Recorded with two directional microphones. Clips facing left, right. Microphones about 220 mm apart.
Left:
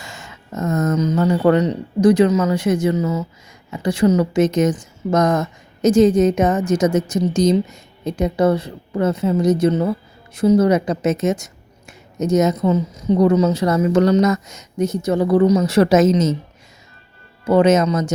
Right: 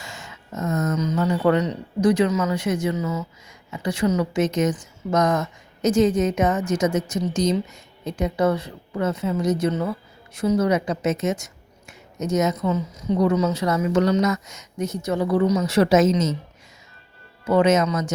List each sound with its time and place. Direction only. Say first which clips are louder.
0.0 s a sound: left 2 dB; 50° left (ahead or behind)
0.9 s a woman's voice: left 5 dB; 35° left (ahead or behind)
17.4 s a woman's voice: left 4 dB; 35° left (ahead or behind)